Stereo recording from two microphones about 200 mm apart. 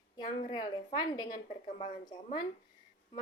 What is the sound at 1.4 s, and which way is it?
Speech, 40° left (ahead or behind).